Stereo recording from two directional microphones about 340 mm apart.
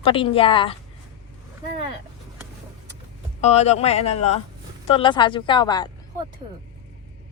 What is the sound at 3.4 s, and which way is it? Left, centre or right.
A woman's voice, centre.